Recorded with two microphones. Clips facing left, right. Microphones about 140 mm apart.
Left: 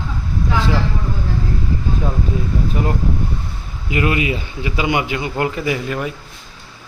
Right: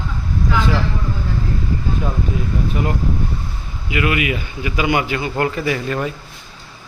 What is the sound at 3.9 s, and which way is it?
Speech, 35° left (ahead or behind).